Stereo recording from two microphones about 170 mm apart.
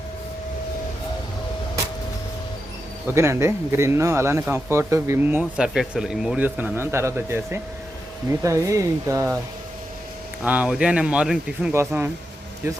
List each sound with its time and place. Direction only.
3.2 s speech: 15° right (ahead or behind)
10.4 s speech: 10° right (ahead or behind)